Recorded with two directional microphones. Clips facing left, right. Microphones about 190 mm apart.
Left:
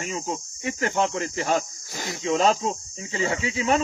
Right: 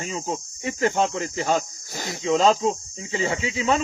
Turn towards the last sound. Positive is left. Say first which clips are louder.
# right 1 dB
turn(degrees=-25)  # may be behind; listen again after turning